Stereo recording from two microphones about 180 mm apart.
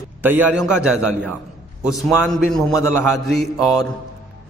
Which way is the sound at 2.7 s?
15° left (ahead or behind).